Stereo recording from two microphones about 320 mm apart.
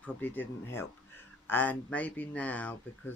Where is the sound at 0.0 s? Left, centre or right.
Centre.